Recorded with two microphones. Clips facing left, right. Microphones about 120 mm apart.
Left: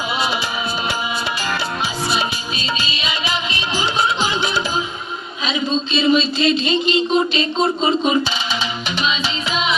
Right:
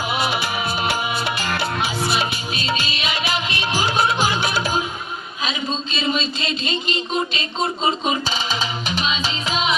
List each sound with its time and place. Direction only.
2.0 s music: 60° right (ahead or behind)
5.5 s a man's voice: 30° left (ahead or behind)
6.9 s music: 35° left (ahead or behind)